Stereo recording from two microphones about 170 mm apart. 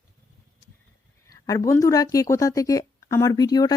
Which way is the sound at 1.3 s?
20° left (ahead or behind).